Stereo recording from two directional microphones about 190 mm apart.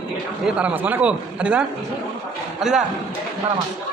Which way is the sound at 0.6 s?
10° right (ahead or behind).